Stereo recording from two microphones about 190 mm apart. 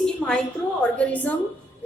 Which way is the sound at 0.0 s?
5° left (ahead or behind).